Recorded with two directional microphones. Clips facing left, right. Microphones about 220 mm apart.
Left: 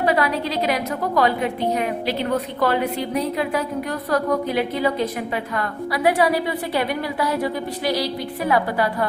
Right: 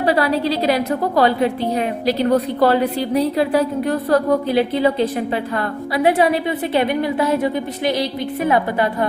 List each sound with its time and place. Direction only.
0.0 s a woman's voice: 30° right (ahead or behind)